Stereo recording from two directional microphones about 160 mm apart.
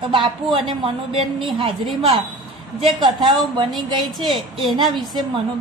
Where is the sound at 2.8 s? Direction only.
30° right (ahead or behind).